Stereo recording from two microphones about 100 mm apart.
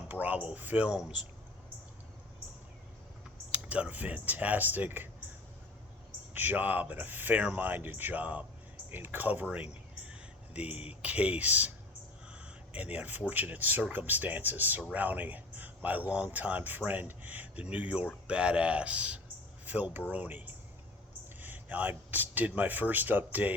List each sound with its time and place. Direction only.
0.1 s speech: 15° right (ahead or behind)
3.5 s speech: 15° right (ahead or behind)
6.3 s speech: 20° right (ahead or behind)
10.1 s a sound: 15° right (ahead or behind)
10.8 s speech: 15° right (ahead or behind)
12.3 s a sound: 10° right (ahead or behind)
13.3 s speech: 15° right (ahead or behind)